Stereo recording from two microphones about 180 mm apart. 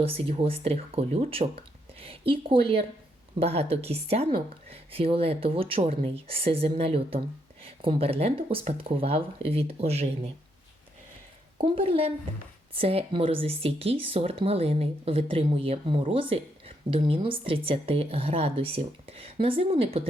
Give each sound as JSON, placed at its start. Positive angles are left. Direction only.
{"t": 0.0, "sound": "speech", "side_deg": -30}
{"t": 11.5, "sound": "speech", "side_deg": -30}